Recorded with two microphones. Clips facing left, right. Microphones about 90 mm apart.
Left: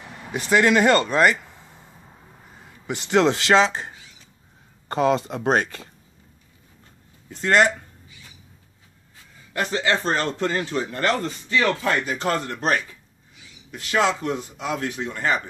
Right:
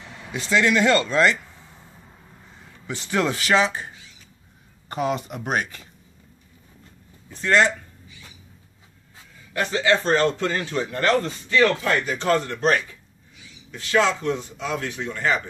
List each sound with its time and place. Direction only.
0.4 s a man's voice: 15° left (ahead or behind)
2.9 s a man's voice: 20° left (ahead or behind); by 5.9 s 35° left (ahead or behind)
9.6 s speech: 35° left (ahead or behind)
9.9 s a man's voice: 20° left (ahead or behind)
13.7 s speech: 15° left (ahead or behind)